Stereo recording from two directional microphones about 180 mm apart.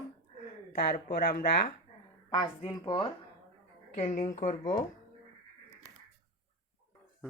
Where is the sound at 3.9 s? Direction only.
40° left (ahead or behind).